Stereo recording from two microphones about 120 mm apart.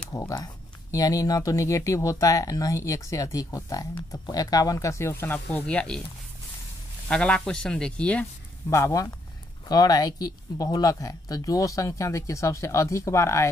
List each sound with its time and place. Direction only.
0.1 s speech: 25° left (ahead or behind); by 5.9 s 10° left (ahead or behind)
7.1 s speech: 10° left (ahead or behind)
8.6 s speech: 25° left (ahead or behind)